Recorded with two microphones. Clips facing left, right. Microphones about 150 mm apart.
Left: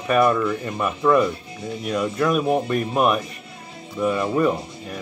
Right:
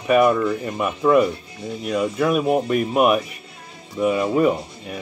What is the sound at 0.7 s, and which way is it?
Speech, 10° right (ahead or behind).